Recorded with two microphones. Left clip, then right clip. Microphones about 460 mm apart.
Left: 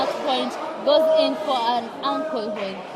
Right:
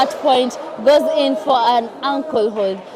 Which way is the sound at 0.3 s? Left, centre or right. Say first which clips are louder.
Right 8 dB; right.